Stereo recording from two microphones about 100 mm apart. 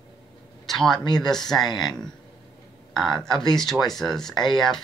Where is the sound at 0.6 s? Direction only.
5° left (ahead or behind).